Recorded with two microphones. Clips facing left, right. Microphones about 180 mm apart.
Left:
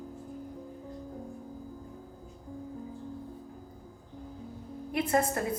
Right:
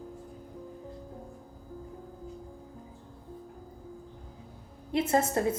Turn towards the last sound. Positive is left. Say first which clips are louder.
# right 2 dB
turn(degrees=-25)  # may be behind; listen again after turning